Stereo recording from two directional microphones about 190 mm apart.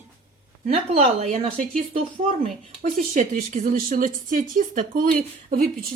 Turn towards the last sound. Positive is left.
turn(degrees=-45)  # may be behind; listen again after turning